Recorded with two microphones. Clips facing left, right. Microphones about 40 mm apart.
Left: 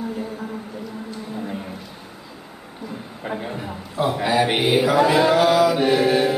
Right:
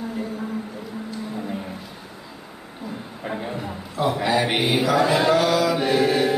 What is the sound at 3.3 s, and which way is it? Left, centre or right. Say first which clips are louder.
A man's voice: left 1 dB; centre.